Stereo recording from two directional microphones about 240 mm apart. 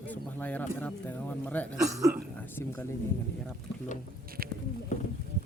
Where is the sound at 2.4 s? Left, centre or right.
Centre.